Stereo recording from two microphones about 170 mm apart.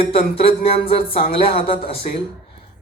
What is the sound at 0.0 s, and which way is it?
Music, 35° left (ahead or behind).